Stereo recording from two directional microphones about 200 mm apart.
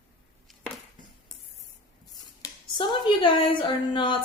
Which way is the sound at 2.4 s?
25° left (ahead or behind).